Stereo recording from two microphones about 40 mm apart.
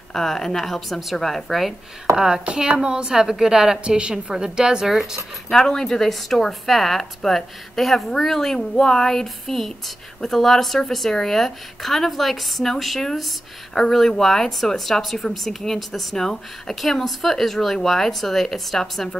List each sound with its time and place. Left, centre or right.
0.1 s speech: centre
2.1 s a woman's voice: centre
5.5 s speech: centre